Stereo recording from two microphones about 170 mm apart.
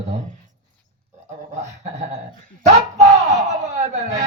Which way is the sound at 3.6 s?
40° right (ahead or behind).